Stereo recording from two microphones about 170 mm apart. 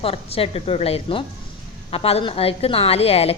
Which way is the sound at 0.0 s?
35° left (ahead or behind).